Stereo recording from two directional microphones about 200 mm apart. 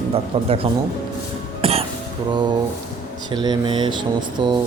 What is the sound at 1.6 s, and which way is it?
Music, 30° right (ahead or behind).